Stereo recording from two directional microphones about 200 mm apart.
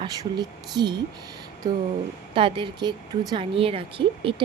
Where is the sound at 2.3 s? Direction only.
25° right (ahead or behind).